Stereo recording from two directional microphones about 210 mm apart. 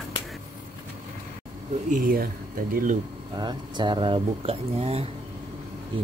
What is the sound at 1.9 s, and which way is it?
Speech, 45° right (ahead or behind).